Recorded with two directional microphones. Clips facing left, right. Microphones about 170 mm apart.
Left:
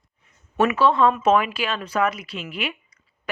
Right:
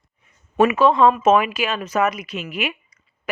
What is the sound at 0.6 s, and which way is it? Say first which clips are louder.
Speech: right 3 dB; 15° right (ahead or behind).